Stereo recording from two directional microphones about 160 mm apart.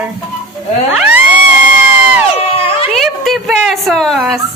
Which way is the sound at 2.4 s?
35° left (ahead or behind).